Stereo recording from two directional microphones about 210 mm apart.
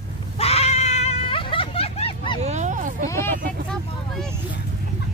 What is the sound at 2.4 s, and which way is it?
Speech, 35° right (ahead or behind).